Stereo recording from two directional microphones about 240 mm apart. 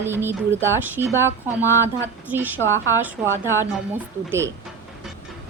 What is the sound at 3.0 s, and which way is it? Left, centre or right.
Speech, centre.